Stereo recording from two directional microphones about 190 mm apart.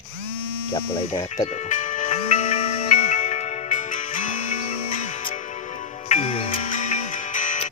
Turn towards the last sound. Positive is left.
turn(degrees=40)  # may be behind; listen again after turning